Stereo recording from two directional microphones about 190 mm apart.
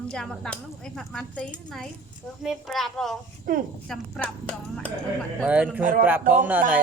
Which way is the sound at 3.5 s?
50° right (ahead or behind).